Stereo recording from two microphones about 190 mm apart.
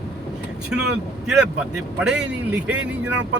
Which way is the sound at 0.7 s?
5° right (ahead or behind).